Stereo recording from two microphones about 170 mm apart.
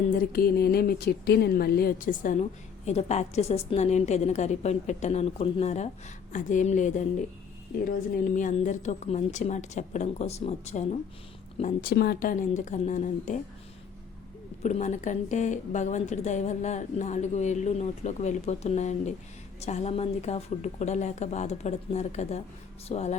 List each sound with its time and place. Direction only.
0.3 s a woman's voice: 65° left (ahead or behind); by 7.0 s 45° left (ahead or behind)
8.4 s a woman's voice: 45° left (ahead or behind)
11.8 s a woman's voice: 65° left (ahead or behind); by 13.4 s 45° left (ahead or behind)
14.6 s a woman's voice: 45° left (ahead or behind)